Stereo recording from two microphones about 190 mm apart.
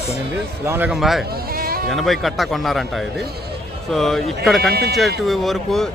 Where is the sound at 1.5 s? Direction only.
50° right (ahead or behind).